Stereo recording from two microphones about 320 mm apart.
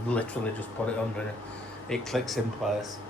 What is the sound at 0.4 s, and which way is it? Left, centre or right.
Speech, centre.